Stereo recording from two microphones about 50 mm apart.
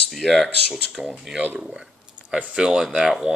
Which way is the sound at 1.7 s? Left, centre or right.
Centre.